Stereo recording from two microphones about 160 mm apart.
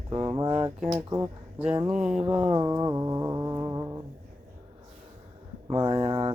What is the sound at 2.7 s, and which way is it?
Music, 20° right (ahead or behind).